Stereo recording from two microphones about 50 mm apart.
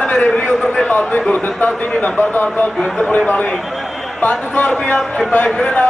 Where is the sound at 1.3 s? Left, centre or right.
Left.